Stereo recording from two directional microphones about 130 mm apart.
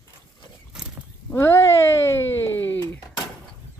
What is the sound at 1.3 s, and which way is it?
Speech, 20° left (ahead or behind).